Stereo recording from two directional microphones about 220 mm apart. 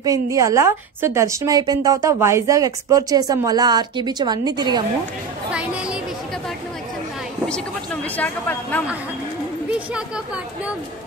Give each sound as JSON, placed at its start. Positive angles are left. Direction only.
{"t": 0.0, "sound": "a woman's voice", "side_deg": -15}
{"t": 5.5, "sound": "chatter", "side_deg": -5}
{"t": 7.4, "sound": "speech", "side_deg": 5}
{"t": 9.7, "sound": "speech", "side_deg": -5}